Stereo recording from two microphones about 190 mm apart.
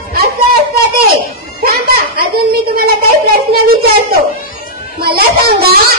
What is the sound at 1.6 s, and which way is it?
Children playing, 50° right (ahead or behind).